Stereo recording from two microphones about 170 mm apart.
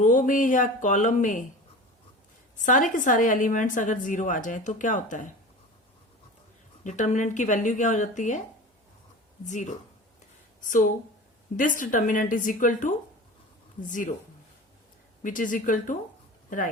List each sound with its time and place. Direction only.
0.0 s a woman's voice: 45° left (ahead or behind)
2.6 s a woman's voice: 50° left (ahead or behind)
6.8 s a woman's voice: 45° left (ahead or behind)
9.5 s a woman's voice: 45° left (ahead or behind)
15.2 s a woman's voice: 50° left (ahead or behind)